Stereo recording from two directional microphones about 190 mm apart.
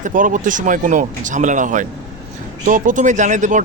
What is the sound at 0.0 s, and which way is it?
Speech, 45° right (ahead or behind).